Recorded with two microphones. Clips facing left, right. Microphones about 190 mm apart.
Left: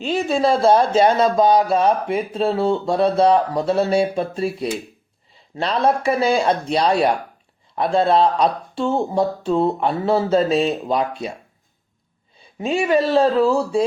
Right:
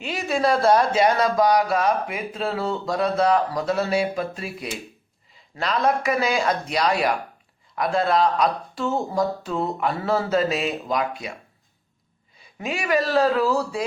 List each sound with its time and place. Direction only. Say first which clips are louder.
0.0 s speech: left 4 dB; 30° left (ahead or behind)
12.5 s speech: left 5 dB; 30° left (ahead or behind)